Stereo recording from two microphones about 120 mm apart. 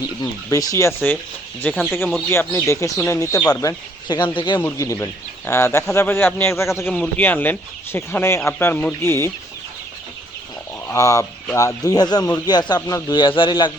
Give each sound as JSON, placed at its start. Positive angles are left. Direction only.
{"t": 0.2, "sound": "speech", "side_deg": 30}
{"t": 1.7, "sound": "speech", "side_deg": -5}
{"t": 2.3, "sound": "speech", "side_deg": 20}
{"t": 4.6, "sound": "speech", "side_deg": 25}
{"t": 10.8, "sound": "speech", "side_deg": 25}